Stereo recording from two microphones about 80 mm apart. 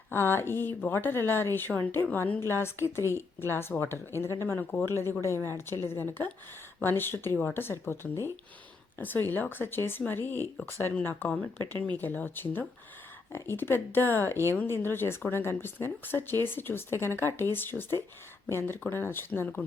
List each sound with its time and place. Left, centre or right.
0.1 s a woman's voice: left